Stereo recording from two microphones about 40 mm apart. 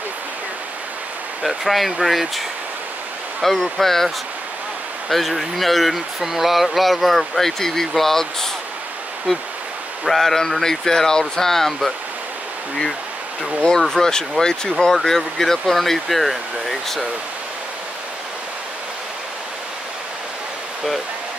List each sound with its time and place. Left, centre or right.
1.4 s speech: centre
3.4 s speech: centre
5.1 s speech: centre
10.0 s speech: centre
13.6 s speech: centre